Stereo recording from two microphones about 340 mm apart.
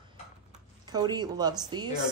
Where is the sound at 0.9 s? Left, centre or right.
Centre.